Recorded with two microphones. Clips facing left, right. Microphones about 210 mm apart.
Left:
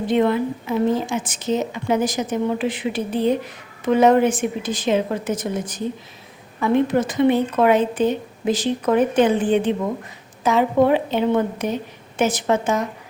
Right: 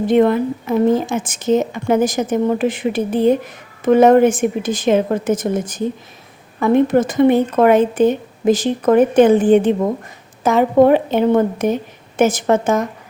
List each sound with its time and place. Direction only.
0.1 s speech: 50° right (ahead or behind)